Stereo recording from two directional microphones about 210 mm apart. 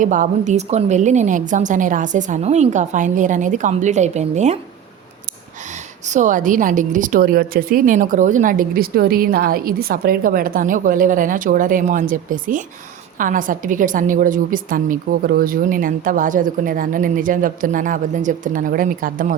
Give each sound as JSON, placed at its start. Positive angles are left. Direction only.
{"t": 0.0, "sound": "a woman's voice", "side_deg": -35}
{"t": 6.1, "sound": "a woman's voice", "side_deg": -35}